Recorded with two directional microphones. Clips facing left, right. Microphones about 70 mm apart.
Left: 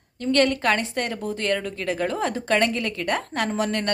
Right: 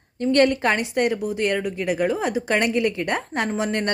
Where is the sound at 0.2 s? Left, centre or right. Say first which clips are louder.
Right 3 dB; right.